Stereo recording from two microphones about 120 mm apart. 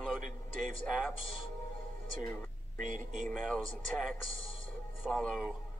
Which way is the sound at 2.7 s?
90° right.